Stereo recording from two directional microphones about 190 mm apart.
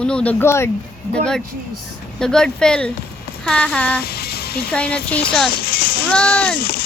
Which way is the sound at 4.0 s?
55° left (ahead or behind).